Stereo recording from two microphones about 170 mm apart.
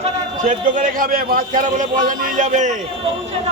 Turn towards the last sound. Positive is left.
turn(degrees=-45)  # may be behind; listen again after turning